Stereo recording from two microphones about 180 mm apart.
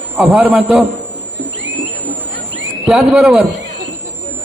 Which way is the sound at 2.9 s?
5° right (ahead or behind).